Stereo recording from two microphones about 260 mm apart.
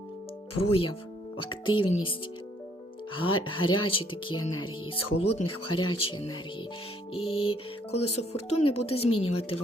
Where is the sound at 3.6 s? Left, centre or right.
Left.